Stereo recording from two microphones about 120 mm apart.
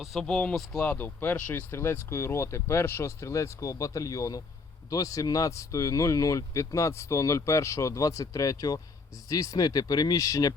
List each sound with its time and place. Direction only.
0.0 s speech: centre (ahead or behind); by 10.5 s 30° left (ahead or behind)